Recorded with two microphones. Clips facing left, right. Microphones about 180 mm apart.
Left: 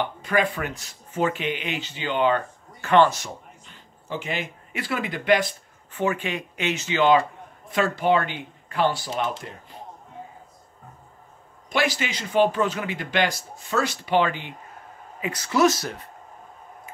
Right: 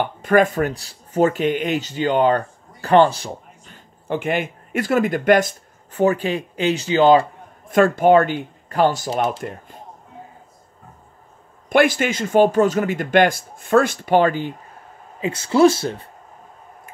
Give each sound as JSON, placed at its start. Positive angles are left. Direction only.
{"t": 0.0, "sound": "speech", "side_deg": -50}
{"t": 3.6, "sound": "speech", "side_deg": -50}
{"t": 7.7, "sound": "speech", "side_deg": -50}
{"t": 11.7, "sound": "speech", "side_deg": -50}
{"t": 15.1, "sound": "speech", "side_deg": -30}